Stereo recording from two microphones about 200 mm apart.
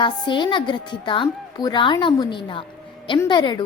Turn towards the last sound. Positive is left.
turn(degrees=20)  # may be behind; listen again after turning